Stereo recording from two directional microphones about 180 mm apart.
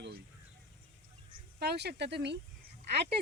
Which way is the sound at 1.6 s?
65° right (ahead or behind).